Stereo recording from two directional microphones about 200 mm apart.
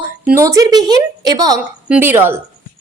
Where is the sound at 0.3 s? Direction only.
15° right (ahead or behind).